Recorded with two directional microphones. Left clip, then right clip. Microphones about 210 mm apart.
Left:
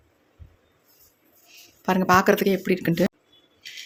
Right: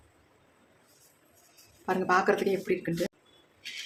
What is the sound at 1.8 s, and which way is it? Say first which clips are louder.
Speech: left 7 dB; 45° left (ahead or behind).